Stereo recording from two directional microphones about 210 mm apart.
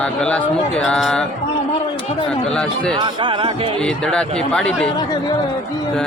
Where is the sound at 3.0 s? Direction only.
25° right (ahead or behind).